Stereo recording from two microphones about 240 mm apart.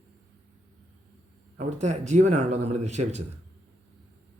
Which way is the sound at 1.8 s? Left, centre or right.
Right.